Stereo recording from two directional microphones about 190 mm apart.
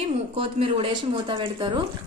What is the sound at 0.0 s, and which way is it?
Speech, 30° right (ahead or behind).